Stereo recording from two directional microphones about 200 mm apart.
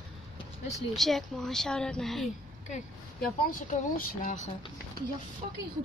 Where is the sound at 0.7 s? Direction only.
Centre (ahead or behind).